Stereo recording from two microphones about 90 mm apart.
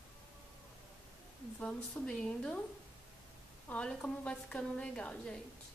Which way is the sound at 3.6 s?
15° left (ahead or behind).